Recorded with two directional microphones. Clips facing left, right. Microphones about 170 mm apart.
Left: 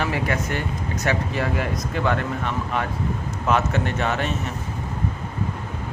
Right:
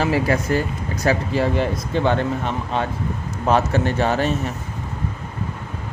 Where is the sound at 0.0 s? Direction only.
35° right (ahead or behind).